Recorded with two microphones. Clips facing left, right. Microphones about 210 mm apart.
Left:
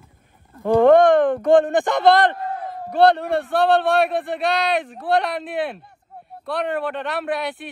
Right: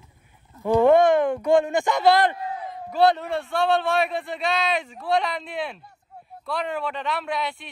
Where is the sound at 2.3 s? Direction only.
55° left (ahead or behind).